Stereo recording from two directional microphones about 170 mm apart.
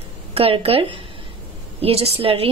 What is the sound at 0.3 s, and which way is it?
A woman's voice, 35° right (ahead or behind).